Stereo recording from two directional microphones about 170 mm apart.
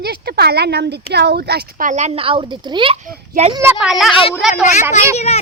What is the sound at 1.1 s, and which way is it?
Speech, 75° right (ahead or behind).